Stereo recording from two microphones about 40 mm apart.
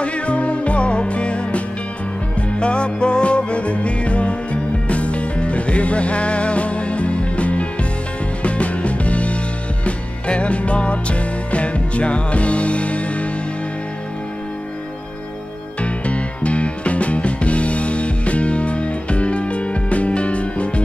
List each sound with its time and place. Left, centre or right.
0.0 s music: left
2.6 s music: left
15.8 s music: left